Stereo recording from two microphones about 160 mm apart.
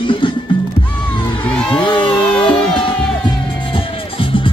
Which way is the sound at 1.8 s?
30° left (ahead or behind).